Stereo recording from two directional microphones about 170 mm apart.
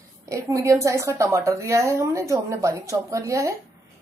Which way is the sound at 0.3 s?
20° right (ahead or behind).